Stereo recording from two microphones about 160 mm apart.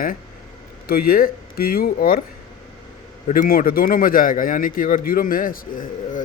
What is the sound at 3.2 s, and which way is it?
A man's voice, 60° left (ahead or behind).